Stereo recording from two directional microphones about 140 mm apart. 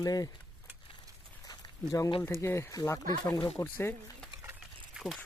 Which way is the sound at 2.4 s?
20° left (ahead or behind).